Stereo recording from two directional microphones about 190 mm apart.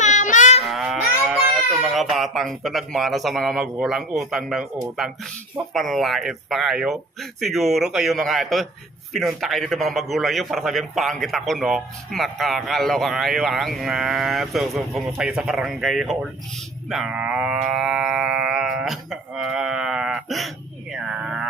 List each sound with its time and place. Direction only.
0.0 s livestock: 40° left (ahead or behind)
0.6 s a child's voice: centre (ahead or behind)
20.9 s a sound: 5° right (ahead or behind)